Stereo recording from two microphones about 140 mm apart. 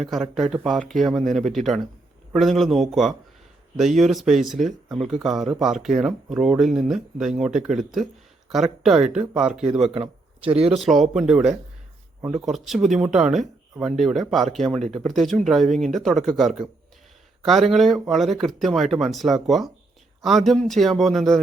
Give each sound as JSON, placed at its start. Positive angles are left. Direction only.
{"t": 0.0, "sound": "speech", "side_deg": 0}
{"t": 9.9, "sound": "speech", "side_deg": -40}
{"t": 10.8, "sound": "speech", "side_deg": 0}